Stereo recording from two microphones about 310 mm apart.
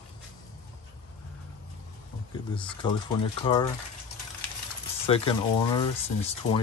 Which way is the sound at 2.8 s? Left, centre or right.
Centre.